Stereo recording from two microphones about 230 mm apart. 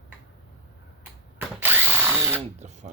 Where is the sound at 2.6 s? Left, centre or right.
Right.